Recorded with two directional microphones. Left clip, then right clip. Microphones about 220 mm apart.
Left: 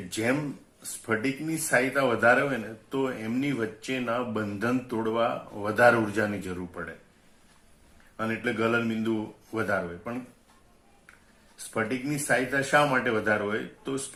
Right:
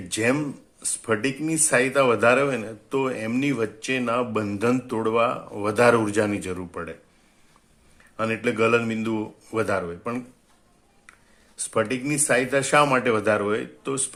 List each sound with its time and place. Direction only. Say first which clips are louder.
0.8 s speech: right 5 dB; 45° right (ahead or behind)
8.1 s speech: right 5 dB; 50° right (ahead or behind)
11.5 s speech: right 6 dB; 50° right (ahead or behind)